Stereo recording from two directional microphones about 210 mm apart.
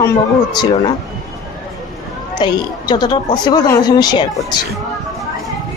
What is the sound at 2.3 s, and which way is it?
Speech, 20° left (ahead or behind).